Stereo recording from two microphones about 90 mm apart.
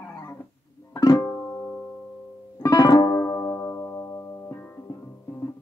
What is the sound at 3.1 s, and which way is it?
Music, 30° left (ahead or behind).